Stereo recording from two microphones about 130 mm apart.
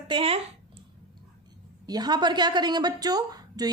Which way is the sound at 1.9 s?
30° right (ahead or behind).